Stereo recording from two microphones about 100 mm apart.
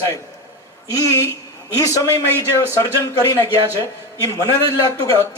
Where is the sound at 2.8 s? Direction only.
40° left (ahead or behind).